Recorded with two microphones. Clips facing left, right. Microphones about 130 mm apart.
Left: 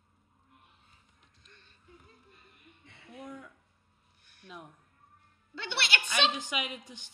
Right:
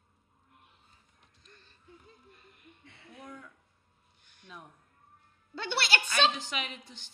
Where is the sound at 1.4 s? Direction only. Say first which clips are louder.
Right 2 dB; 35° right (ahead or behind).